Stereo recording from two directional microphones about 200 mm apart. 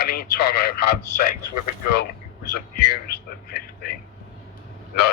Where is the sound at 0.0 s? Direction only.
50° left (ahead or behind).